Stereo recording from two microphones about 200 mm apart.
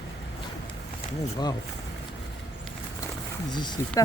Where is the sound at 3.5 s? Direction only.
20° left (ahead or behind).